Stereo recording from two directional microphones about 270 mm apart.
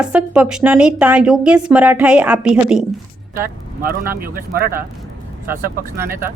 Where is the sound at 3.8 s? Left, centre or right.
Right.